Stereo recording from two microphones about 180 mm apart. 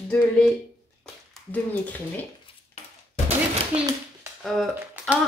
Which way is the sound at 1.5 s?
10° left (ahead or behind).